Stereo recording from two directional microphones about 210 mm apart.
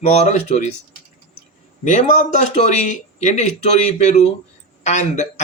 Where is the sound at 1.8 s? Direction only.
35° left (ahead or behind).